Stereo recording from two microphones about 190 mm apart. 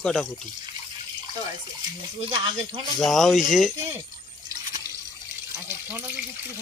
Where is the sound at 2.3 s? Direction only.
25° right (ahead or behind).